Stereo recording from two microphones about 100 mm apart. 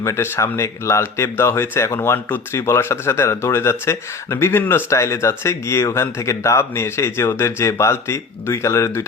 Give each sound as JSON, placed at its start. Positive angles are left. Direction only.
{"t": 0.0, "sound": "speech", "side_deg": 30}